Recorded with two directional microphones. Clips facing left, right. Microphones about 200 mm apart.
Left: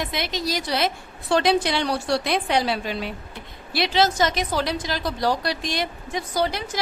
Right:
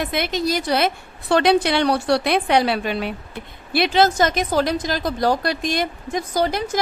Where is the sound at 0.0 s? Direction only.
55° right (ahead or behind).